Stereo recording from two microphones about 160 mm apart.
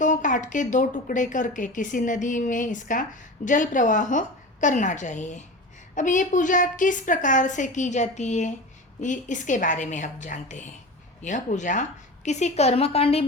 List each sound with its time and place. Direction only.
0.0 s a woman's voice: 50° left (ahead or behind)